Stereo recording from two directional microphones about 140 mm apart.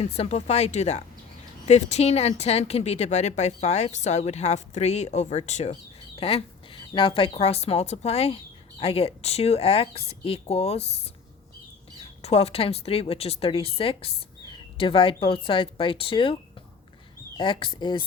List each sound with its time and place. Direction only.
0.0 s speech: 50° left (ahead or behind)
6.1 s speech: 45° left (ahead or behind)
12.2 s a woman's voice: 45° left (ahead or behind)